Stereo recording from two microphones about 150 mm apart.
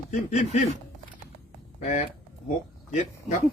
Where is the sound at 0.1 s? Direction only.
50° left (ahead or behind).